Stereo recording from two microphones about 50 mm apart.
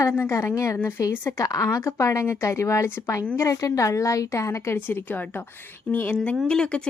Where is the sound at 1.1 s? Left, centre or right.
Left.